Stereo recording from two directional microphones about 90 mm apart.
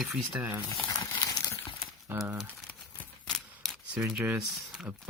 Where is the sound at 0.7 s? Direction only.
45° left (ahead or behind).